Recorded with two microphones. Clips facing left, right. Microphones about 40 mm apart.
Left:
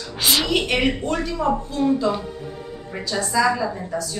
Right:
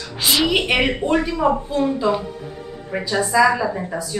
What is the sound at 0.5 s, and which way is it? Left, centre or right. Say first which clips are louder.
A woman's voice: right 2 dB; centre.